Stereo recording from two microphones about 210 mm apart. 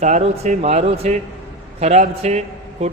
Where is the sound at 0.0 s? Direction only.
35° right (ahead or behind).